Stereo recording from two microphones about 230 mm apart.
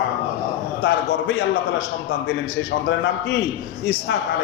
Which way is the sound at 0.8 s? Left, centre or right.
Left.